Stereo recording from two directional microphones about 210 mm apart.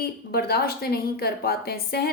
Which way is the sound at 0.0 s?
45° left (ahead or behind).